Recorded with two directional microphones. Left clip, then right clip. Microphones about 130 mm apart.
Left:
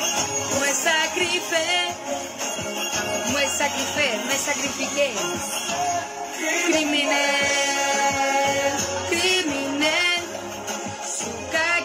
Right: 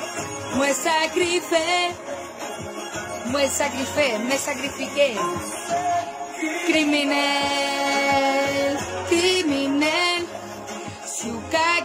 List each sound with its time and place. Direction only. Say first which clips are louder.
0.7 s music: right 1 dB; 35° right (ahead or behind)
3.3 s speech: right 3 dB; 35° right (ahead or behind)
6.7 s music: right 3 dB; 35° right (ahead or behind)
11.5 s music: right 2 dB; 30° right (ahead or behind)